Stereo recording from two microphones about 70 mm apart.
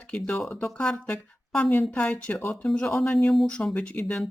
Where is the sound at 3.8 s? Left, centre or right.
Centre.